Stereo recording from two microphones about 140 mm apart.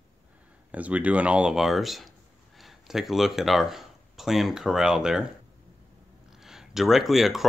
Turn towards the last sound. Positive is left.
turn(degrees=0)  # may be behind; listen again after turning